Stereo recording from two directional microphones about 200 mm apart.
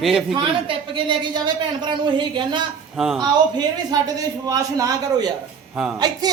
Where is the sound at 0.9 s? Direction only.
25° right (ahead or behind).